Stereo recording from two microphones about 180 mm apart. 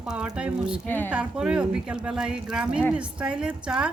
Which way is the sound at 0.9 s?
10° left (ahead or behind).